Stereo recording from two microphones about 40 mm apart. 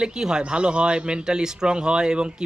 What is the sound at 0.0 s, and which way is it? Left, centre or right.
A man's voice, centre.